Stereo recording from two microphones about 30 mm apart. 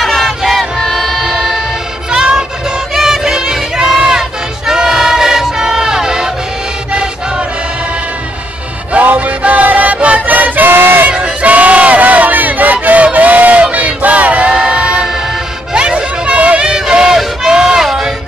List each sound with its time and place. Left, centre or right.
0.0 s vehicle: centre
2.0 s music: right
2.9 s music: centre
3.8 s crowd: centre
6.9 s music: right
9.0 s music: right
9.4 s music: right
9.9 s music: right
10.2 s music: right
11.4 s battle cry: right
14.5 s a sound: right
15.7 s music: right
16.3 s a sound: right
17.5 s music: right